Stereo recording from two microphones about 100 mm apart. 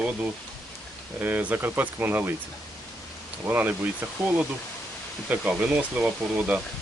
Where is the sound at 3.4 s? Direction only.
20° right (ahead or behind).